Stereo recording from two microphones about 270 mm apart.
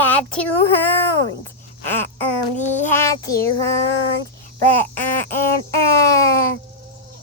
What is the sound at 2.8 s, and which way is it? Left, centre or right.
Speech, centre.